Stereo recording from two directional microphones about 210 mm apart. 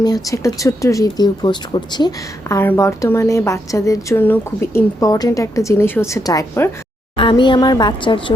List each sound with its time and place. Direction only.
0.0 s a woman's voice: 15° left (ahead or behind)